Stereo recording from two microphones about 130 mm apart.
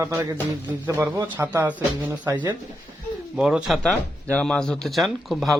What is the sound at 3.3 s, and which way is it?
Speech, 5° right (ahead or behind).